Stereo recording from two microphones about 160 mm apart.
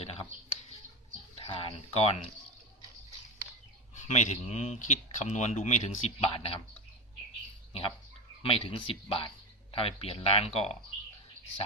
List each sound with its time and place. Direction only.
1.4 s speech: 35° left (ahead or behind)
4.1 s speech: 45° left (ahead or behind)
6.1 s speech: 35° left (ahead or behind)
7.7 s speech: 35° left (ahead or behind)